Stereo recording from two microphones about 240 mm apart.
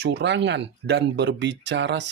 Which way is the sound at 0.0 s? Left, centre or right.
Right.